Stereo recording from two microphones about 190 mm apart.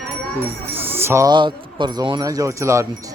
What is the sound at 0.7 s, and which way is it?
Speech, 10° right (ahead or behind).